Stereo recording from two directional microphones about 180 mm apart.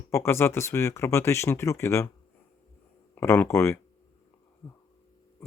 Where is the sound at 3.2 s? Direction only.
15° left (ahead or behind).